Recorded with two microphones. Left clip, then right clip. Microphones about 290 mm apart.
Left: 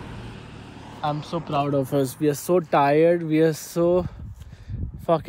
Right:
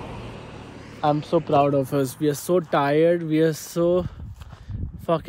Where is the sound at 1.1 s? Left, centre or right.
Centre.